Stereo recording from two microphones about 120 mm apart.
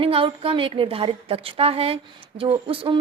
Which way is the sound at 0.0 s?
50° right (ahead or behind).